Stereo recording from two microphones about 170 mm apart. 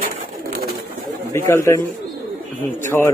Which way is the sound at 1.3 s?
15° left (ahead or behind).